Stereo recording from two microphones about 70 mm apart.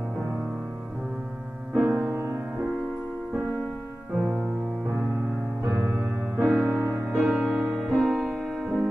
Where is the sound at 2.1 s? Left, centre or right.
Right.